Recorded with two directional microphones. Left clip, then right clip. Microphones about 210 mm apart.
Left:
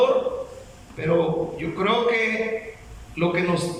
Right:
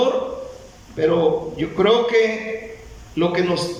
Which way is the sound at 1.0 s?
25° right (ahead or behind).